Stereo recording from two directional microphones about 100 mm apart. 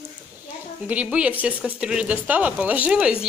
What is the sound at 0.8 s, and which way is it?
Speech, 15° right (ahead or behind).